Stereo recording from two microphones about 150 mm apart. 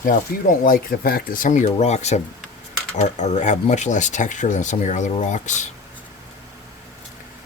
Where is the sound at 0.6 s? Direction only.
70° left (ahead or behind); by 5.7 s 55° left (ahead or behind).